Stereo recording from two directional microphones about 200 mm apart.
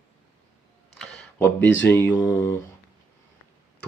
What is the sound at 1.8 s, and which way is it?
Speech, 10° left (ahead or behind).